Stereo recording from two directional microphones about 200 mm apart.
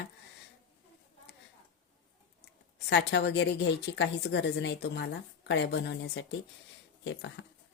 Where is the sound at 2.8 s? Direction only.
60° left (ahead or behind).